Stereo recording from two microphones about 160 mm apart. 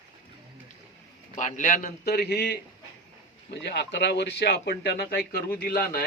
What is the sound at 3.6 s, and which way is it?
Speech, 90° left.